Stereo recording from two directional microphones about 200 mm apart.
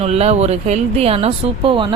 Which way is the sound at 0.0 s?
30° right (ahead or behind).